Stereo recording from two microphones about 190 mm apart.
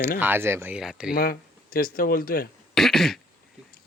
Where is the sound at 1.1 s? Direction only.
50° left (ahead or behind).